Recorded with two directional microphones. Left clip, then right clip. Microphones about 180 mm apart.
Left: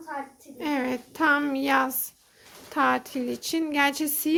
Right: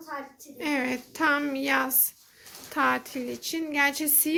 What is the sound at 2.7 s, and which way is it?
A woman's voice, 15° left (ahead or behind).